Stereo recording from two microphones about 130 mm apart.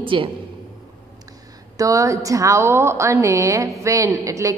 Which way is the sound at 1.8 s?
25° right (ahead or behind).